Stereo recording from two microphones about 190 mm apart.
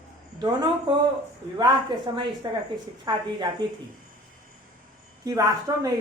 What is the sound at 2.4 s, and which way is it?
Speech, 20° right (ahead or behind).